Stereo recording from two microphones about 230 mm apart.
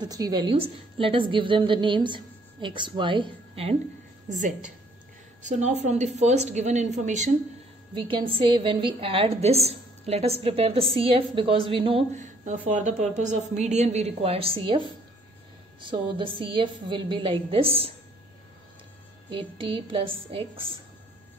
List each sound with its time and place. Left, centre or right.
0.0 s a woman's voice: centre
5.4 s a woman's voice: right
19.3 s a woman's voice: right